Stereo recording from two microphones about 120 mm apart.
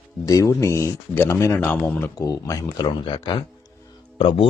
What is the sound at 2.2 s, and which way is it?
Speech, 30° left (ahead or behind).